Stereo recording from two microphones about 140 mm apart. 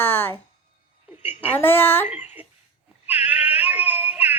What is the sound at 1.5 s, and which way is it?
Speech, 15° left (ahead or behind).